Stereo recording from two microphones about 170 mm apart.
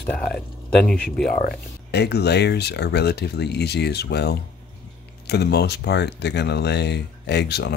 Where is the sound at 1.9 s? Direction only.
75° left (ahead or behind).